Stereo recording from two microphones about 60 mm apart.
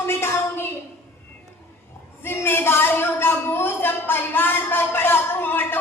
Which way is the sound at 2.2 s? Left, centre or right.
Left.